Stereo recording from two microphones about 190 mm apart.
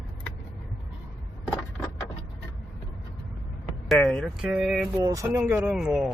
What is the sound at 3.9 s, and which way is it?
Speech, 5° left (ahead or behind).